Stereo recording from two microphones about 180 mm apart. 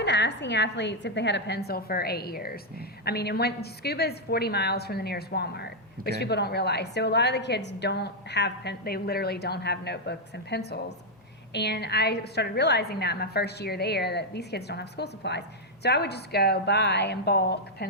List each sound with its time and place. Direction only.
0.0 s a woman's voice: 70° left (ahead or behind)